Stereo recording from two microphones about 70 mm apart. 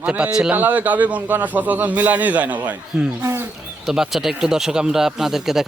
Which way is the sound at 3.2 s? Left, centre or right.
Right.